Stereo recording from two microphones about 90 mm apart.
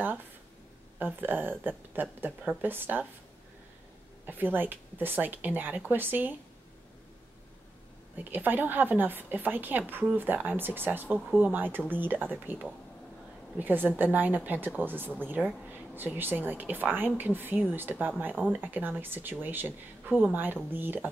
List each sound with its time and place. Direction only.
0.9 s speech: 20° right (ahead or behind)
4.3 s speech: 20° right (ahead or behind)
8.2 s speech: 20° right (ahead or behind)
13.6 s speech: 20° right (ahead or behind)